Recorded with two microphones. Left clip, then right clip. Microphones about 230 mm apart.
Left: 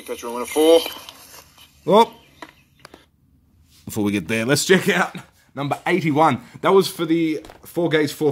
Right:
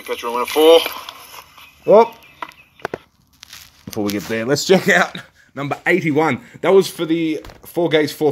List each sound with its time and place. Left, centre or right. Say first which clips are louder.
0.0 s speech: right 6 dB; centre
3.9 s speech: right 1 dB; left
4.6 s speech: right 6 dB; centre